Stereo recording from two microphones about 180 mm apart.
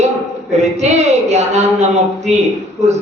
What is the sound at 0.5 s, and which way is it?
A man's voice, 40° right (ahead or behind).